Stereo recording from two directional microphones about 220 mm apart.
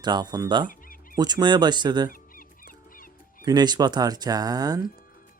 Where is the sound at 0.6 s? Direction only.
40° left (ahead or behind).